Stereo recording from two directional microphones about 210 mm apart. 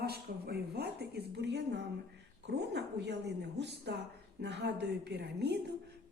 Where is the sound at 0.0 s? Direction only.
50° right (ahead or behind).